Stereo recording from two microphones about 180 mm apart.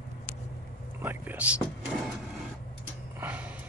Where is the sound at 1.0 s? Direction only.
10° right (ahead or behind).